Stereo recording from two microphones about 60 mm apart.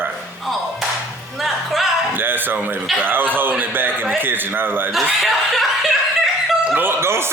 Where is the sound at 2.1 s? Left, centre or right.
Right.